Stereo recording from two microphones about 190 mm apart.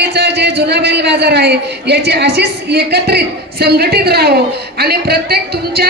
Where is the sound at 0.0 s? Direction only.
60° right (ahead or behind).